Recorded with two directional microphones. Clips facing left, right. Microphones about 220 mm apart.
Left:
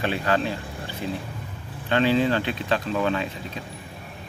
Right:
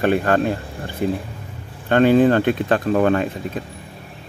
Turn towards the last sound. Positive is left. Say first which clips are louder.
# right 8 dB
turn(degrees=-50)  # may be behind; listen again after turning